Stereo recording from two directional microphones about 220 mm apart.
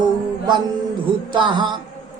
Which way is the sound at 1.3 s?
20° right (ahead or behind).